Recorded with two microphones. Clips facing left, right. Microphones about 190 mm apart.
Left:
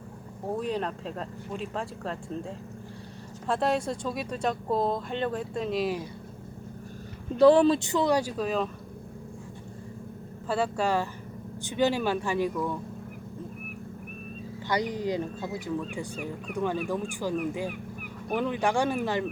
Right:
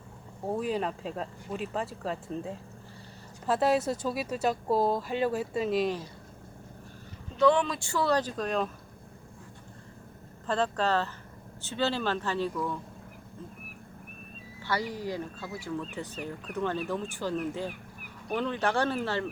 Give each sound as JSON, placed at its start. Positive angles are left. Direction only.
{"t": 0.4, "sound": "speech", "side_deg": -5}
{"t": 7.3, "sound": "speech", "side_deg": 35}
{"t": 7.8, "sound": "speech", "side_deg": 20}
{"t": 10.4, "sound": "speech", "side_deg": 10}
{"t": 14.6, "sound": "speech", "side_deg": 15}